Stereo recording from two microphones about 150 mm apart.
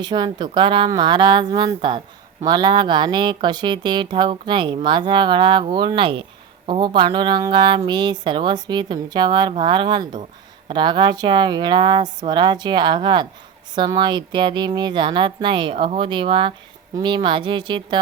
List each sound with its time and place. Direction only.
0.0 s speech: 30° right (ahead or behind)